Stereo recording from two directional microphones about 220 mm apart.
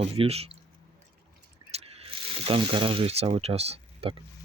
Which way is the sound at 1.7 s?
25° right (ahead or behind).